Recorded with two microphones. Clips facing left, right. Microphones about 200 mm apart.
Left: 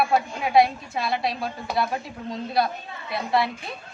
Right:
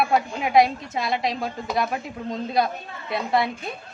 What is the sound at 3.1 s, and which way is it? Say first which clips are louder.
Speech: right 1 dB; 20° right (ahead or behind).